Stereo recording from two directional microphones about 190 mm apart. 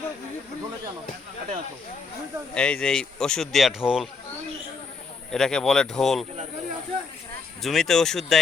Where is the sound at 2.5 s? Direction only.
5° left (ahead or behind).